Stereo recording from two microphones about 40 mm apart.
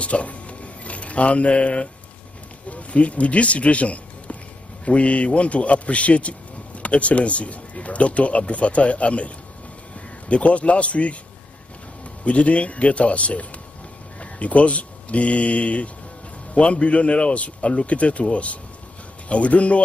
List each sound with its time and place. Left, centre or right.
0.0 s speech: left
12.3 s speech: left